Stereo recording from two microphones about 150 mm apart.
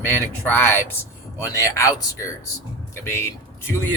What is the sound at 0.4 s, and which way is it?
A man's voice, 10° left (ahead or behind).